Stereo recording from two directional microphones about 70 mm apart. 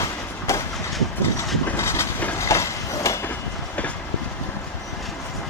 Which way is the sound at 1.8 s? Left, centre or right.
Left.